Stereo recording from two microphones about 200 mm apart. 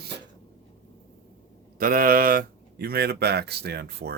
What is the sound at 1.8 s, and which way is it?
Speech, 45° right (ahead or behind).